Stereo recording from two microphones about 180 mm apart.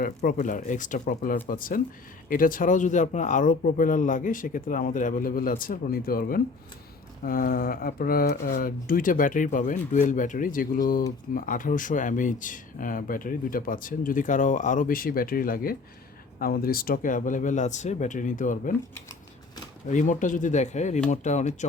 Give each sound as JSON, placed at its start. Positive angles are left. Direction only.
{"t": 0.0, "sound": "speech", "side_deg": 55}
{"t": 19.9, "sound": "speech", "side_deg": 45}